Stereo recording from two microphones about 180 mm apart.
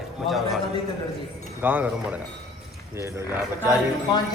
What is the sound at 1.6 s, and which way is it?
Speech, 10° right (ahead or behind).